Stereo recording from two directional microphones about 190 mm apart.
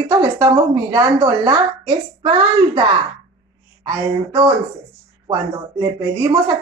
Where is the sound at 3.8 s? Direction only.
20° right (ahead or behind).